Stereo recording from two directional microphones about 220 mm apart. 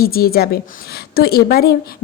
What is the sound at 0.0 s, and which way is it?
A woman's voice, 45° left (ahead or behind).